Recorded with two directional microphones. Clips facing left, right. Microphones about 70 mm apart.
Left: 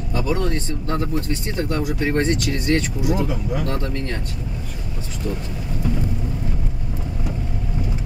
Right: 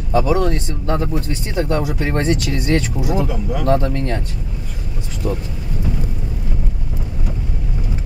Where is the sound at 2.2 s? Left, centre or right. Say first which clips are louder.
Right 2 dB; left.